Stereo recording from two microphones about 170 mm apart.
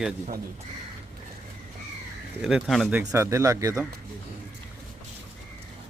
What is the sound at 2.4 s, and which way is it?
Speech, 5° right (ahead or behind).